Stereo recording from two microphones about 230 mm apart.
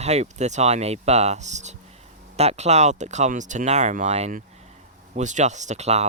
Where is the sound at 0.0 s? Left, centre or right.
Right.